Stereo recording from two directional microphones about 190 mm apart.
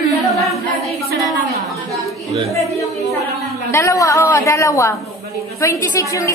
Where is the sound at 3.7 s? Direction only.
15° left (ahead or behind).